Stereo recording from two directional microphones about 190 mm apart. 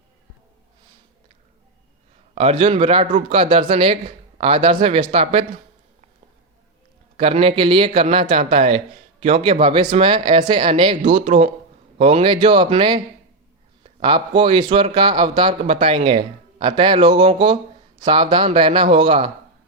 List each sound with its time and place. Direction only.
2.3 s a man's voice: 30° right (ahead or behind)
7.2 s a man's voice: 30° right (ahead or behind)
14.0 s a man's voice: 25° right (ahead or behind)